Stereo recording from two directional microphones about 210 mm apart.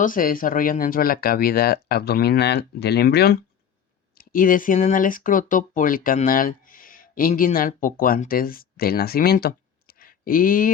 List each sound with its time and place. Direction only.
0.0 s speech: 40° left (ahead or behind)